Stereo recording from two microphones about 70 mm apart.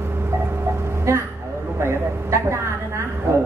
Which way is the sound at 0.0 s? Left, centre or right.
Right.